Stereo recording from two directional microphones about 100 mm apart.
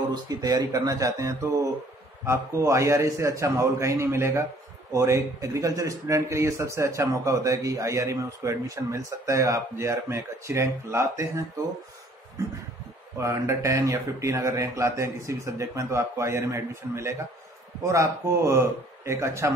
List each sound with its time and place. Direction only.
0.1 s speech: 40° right (ahead or behind)
13.2 s speech: 30° right (ahead or behind)